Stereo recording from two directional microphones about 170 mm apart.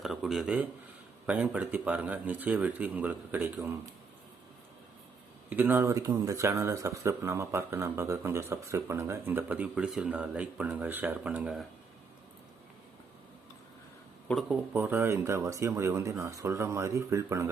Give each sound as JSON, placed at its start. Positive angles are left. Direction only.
{"t": 0.0, "sound": "speech", "side_deg": 0}
{"t": 5.5, "sound": "speech", "side_deg": -10}
{"t": 14.3, "sound": "speech", "side_deg": 0}
{"t": 14.7, "sound": "speech", "side_deg": -10}